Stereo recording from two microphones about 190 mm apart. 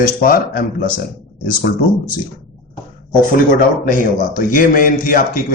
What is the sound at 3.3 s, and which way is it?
Speech, 50° left (ahead or behind).